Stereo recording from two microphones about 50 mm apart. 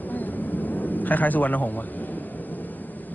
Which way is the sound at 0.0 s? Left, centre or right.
Left.